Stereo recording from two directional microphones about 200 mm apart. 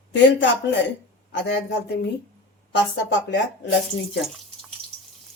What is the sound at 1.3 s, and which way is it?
Speech, 65° left (ahead or behind).